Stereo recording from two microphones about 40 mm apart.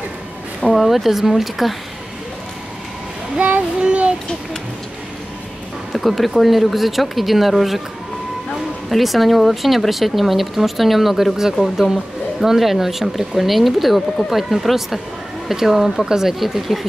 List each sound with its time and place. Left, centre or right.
0.7 s speech: centre
3.8 s speech: right
5.9 s speech: centre
8.8 s speech: centre